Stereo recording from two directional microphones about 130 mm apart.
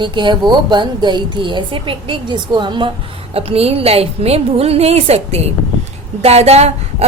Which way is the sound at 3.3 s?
50° right (ahead or behind).